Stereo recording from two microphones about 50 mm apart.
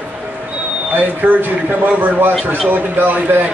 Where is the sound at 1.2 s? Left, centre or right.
Right.